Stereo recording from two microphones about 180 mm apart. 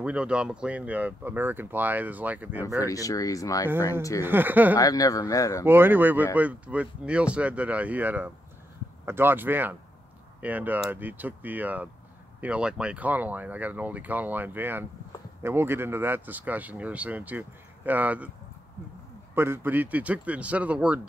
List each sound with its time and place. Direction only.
0.0 s speech: 5° right (ahead or behind)
2.8 s speech: 20° left (ahead or behind)
4.2 s speech: 10° right (ahead or behind)
4.7 s speech: 20° left (ahead or behind)
5.7 s speech: 10° right (ahead or behind)
19.3 s speech: 10° right (ahead or behind)